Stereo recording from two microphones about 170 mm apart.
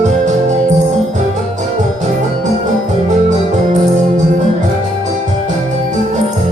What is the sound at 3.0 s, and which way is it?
Music, 45° right (ahead or behind).